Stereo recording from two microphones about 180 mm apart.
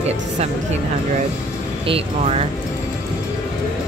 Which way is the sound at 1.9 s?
35° right (ahead or behind).